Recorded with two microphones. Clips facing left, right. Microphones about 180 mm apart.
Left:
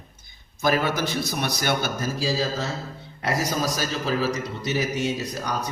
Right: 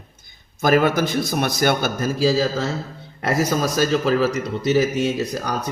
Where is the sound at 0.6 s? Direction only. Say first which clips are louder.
Right 6 dB; 50° right (ahead or behind).